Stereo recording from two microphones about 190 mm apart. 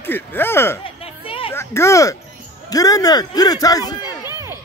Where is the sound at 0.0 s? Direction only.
10° left (ahead or behind).